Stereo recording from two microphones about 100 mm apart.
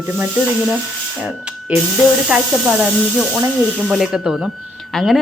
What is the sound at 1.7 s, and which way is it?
A woman's voice, 15° right (ahead or behind).